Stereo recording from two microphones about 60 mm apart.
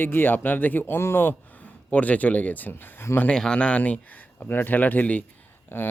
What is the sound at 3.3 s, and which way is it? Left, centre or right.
Speech, centre.